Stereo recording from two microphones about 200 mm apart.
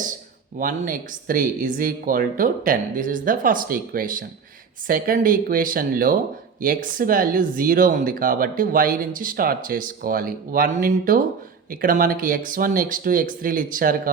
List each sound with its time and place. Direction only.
0.6 s speech: 45° right (ahead or behind)